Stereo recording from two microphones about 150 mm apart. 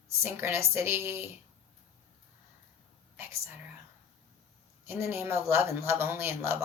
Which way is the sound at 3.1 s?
15° right (ahead or behind).